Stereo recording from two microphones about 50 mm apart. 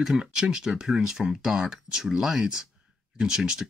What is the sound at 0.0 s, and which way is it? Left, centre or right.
Speech, centre.